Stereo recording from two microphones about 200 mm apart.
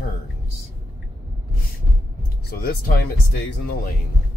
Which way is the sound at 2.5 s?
50° left (ahead or behind).